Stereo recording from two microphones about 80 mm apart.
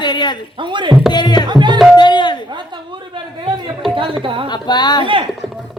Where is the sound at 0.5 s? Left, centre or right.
Right.